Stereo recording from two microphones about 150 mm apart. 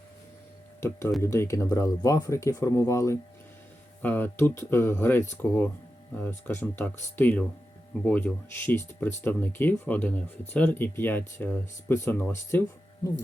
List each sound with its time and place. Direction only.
0.8 s speech: 15° left (ahead or behind)